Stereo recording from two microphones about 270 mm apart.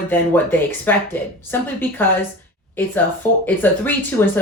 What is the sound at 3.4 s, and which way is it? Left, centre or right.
Speech, centre.